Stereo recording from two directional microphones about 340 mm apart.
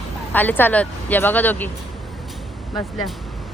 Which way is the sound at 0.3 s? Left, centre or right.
Centre.